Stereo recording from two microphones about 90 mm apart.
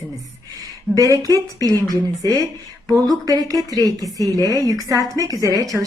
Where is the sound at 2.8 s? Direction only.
45° right (ahead or behind).